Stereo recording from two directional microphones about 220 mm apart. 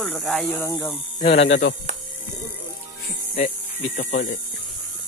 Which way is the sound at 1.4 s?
55° left (ahead or behind).